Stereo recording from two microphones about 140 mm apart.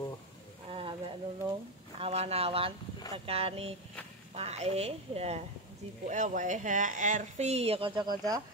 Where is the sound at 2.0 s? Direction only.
50° right (ahead or behind).